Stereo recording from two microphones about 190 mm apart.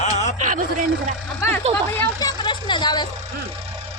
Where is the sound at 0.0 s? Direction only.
40° left (ahead or behind).